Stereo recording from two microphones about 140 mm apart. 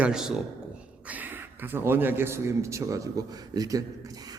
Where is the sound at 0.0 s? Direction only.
5° right (ahead or behind).